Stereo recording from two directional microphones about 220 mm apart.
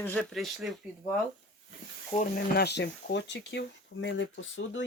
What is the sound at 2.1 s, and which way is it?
Speech, 40° left (ahead or behind).